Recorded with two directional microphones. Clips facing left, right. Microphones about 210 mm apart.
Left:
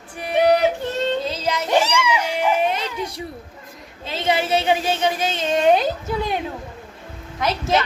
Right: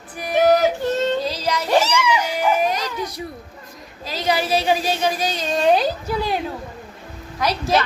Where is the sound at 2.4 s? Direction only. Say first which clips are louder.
Left 1 dB; 25° left (ahead or behind).